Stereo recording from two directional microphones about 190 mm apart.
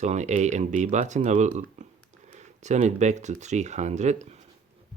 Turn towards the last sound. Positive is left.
turn(degrees=-35)  # may be behind; listen again after turning